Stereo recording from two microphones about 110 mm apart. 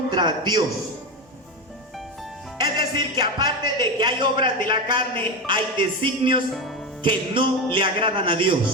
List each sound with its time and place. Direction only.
0.1 s a man's voice: 40° right (ahead or behind)
2.6 s speech: 40° right (ahead or behind)